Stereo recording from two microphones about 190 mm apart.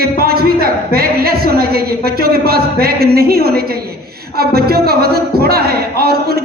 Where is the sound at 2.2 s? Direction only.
55° right (ahead or behind).